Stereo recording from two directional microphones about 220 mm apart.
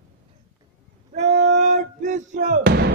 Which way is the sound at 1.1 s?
30° right (ahead or behind).